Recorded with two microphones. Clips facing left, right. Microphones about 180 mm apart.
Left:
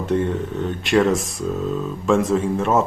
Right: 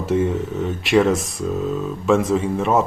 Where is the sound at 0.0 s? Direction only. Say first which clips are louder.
Right 1 dB; 5° right (ahead or behind).